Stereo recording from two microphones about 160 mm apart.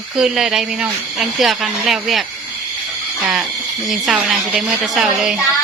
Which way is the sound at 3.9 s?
Centre (ahead or behind).